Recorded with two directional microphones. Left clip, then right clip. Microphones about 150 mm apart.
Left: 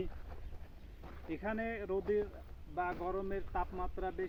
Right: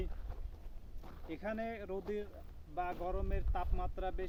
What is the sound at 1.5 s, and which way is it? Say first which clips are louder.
Speech: left 2 dB; 35° right (ahead or behind).